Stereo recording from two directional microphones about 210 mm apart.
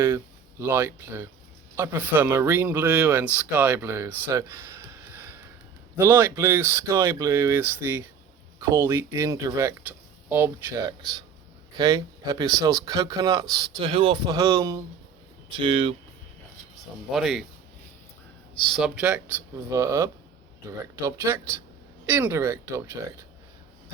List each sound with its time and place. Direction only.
0.6 s speech: 10° right (ahead or behind)
15.5 s speech: 25° right (ahead or behind)
17.1 s speech: centre (ahead or behind)
18.7 s speech: 5° right (ahead or behind)